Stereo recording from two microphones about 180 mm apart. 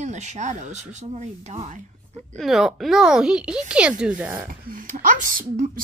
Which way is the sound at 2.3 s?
Centre (ahead or behind).